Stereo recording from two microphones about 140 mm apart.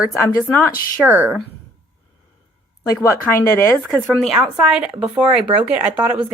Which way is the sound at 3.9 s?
Centre (ahead or behind).